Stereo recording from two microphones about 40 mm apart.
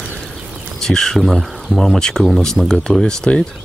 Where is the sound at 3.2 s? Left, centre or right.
Left.